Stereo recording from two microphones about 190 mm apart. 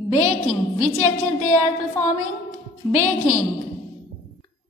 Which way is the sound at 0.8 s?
40° left (ahead or behind).